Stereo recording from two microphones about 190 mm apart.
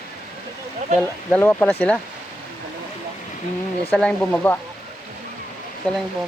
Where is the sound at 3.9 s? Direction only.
5° left (ahead or behind).